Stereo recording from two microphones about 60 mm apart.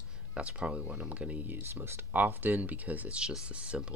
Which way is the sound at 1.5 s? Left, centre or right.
Right.